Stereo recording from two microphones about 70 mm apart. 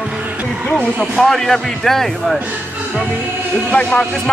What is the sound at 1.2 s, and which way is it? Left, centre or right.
Speech, centre.